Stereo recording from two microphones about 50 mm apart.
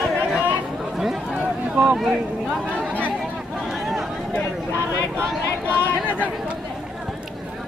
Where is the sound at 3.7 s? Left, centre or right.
Centre.